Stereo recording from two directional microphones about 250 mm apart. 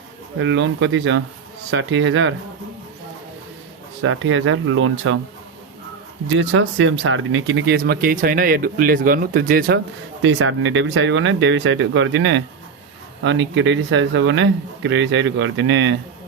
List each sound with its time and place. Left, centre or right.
0.3 s speech: right
4.0 s speech: right
6.2 s speech: right
10.2 s speech: right